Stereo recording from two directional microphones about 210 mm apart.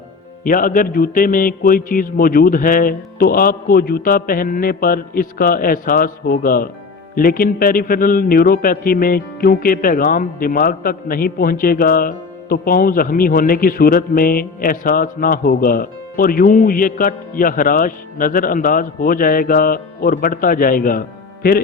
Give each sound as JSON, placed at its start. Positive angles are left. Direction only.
{"t": 0.4, "sound": "a man's voice", "side_deg": 40}